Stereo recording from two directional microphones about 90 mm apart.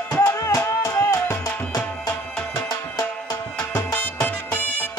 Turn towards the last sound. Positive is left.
turn(degrees=20)  # may be behind; listen again after turning